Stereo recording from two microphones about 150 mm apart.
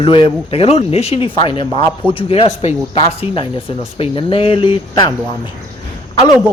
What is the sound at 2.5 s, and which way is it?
Speech, 50° left (ahead or behind).